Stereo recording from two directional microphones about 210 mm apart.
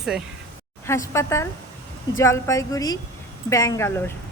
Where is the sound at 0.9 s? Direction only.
15° left (ahead or behind).